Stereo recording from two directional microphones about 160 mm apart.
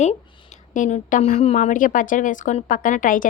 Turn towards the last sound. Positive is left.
turn(degrees=55)  # may be behind; listen again after turning